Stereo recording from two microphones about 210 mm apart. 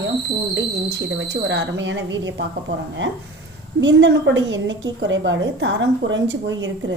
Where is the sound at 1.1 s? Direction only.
55° right (ahead or behind).